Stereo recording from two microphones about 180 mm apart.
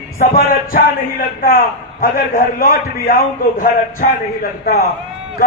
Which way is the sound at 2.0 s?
50° left (ahead or behind).